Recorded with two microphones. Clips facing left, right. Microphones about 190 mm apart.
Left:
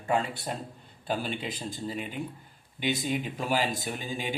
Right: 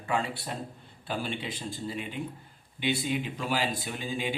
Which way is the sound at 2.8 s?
40° left (ahead or behind).